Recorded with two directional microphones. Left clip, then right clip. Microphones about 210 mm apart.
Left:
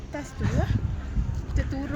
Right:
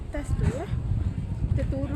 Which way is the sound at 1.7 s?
50° left (ahead or behind).